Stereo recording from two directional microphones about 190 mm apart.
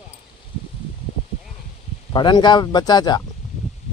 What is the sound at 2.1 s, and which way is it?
Speech, 25° left (ahead or behind).